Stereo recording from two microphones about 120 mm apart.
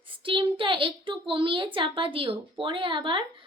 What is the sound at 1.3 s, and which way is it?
A woman's voice, 45° right (ahead or behind).